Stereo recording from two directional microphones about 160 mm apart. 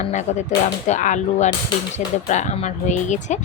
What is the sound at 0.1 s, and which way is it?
Speech, 45° left (ahead or behind).